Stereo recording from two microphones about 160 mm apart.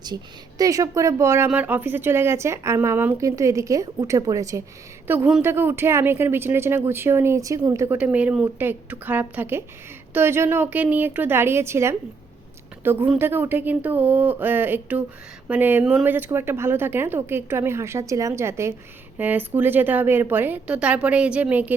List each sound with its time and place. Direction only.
0.6 s a woman's voice: 20° right (ahead or behind)